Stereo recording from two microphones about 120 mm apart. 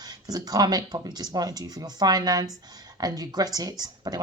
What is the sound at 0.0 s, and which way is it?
A woman's voice, 35° right (ahead or behind).